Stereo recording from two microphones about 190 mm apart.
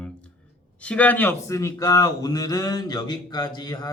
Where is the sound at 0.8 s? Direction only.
5° left (ahead or behind).